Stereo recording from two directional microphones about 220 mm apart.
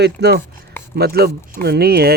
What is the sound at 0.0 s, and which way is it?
Speech, 50° right (ahead or behind).